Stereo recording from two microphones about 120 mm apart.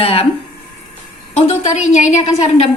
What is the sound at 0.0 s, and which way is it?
Speech, 55° left (ahead or behind).